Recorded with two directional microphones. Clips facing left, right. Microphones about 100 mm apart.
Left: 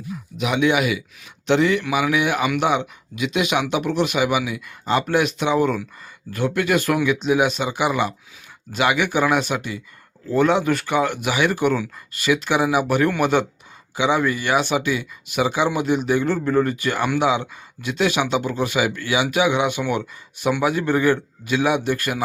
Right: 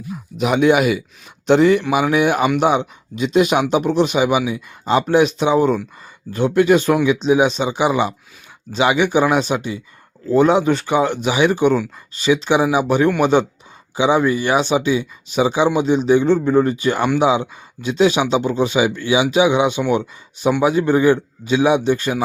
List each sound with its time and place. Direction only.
0.3 s a man's voice: 40° right (ahead or behind)